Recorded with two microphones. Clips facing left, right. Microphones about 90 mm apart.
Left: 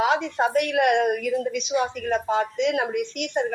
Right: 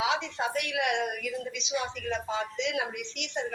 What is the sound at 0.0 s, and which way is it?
A woman's voice, 50° left (ahead or behind).